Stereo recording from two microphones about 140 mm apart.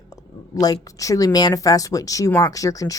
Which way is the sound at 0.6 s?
25° left (ahead or behind).